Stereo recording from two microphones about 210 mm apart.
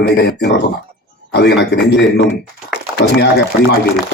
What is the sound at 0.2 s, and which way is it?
A man's voice, 50° left (ahead or behind).